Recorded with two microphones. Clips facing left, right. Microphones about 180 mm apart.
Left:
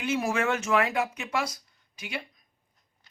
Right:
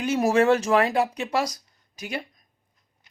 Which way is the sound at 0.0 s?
40° right (ahead or behind).